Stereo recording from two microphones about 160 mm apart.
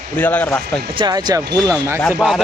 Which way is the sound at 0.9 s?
25° right (ahead or behind).